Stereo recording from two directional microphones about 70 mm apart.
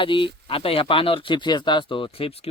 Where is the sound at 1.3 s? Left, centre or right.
Left.